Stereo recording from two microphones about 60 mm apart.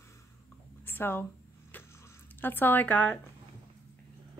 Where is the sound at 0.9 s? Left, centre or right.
Left.